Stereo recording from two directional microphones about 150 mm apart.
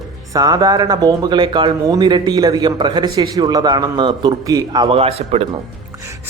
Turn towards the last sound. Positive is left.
turn(degrees=-40)  # may be behind; listen again after turning